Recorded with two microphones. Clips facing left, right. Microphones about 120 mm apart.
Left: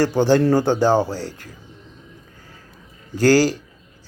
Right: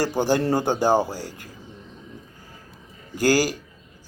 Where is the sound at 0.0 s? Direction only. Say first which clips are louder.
Left 5 dB; 10° right (ahead or behind).